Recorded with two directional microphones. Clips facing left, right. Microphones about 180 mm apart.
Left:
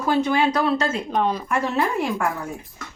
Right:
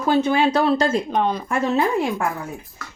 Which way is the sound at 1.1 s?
Centre (ahead or behind).